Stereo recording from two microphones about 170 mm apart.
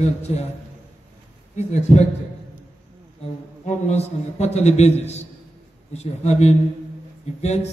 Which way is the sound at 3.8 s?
40° left (ahead or behind).